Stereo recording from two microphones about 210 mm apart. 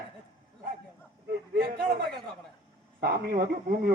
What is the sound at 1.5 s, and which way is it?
Speech, 50° right (ahead or behind).